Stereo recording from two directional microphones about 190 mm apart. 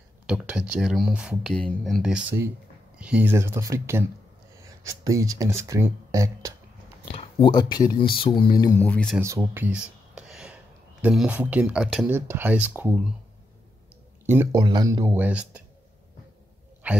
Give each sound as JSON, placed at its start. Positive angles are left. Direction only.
{"t": 0.3, "sound": "speech", "side_deg": -5}
{"t": 7.1, "sound": "speech", "side_deg": 30}
{"t": 9.2, "sound": "speech", "side_deg": -15}
{"t": 14.2, "sound": "speech", "side_deg": -10}
{"t": 16.8, "sound": "a sound", "side_deg": -10}